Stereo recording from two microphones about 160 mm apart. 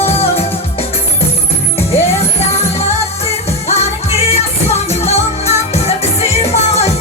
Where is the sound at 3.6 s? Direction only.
40° left (ahead or behind).